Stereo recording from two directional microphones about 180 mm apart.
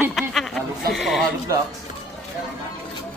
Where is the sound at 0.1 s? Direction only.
Centre (ahead or behind).